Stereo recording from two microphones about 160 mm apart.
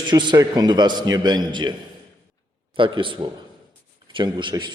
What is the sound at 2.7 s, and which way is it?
A man's voice, 30° right (ahead or behind).